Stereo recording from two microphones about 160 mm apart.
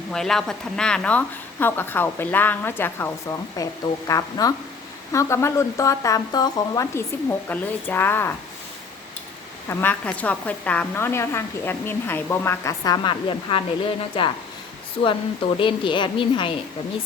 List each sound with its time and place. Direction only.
0.1 s a woman's voice: 5° left (ahead or behind)
9.6 s a woman's voice: 10° left (ahead or behind); by 14.3 s 35° left (ahead or behind)
15.5 s a woman's voice: 30° left (ahead or behind)